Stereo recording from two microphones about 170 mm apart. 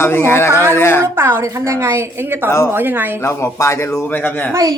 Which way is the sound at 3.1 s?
15° left (ahead or behind).